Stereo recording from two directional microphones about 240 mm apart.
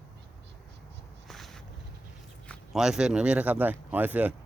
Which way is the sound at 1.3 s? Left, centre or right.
Centre.